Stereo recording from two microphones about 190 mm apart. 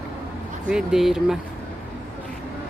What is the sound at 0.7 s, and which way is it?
Speech, 5° right (ahead or behind).